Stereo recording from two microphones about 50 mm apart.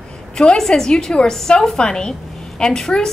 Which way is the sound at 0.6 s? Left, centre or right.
Centre.